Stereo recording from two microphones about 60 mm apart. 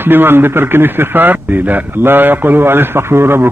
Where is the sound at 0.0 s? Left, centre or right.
Right.